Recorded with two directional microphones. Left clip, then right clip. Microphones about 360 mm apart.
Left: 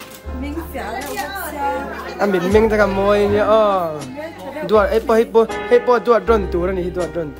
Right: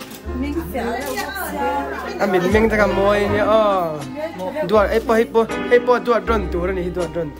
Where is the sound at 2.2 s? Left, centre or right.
Centre.